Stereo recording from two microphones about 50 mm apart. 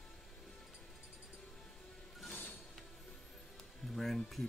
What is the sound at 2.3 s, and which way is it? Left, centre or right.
Music, left.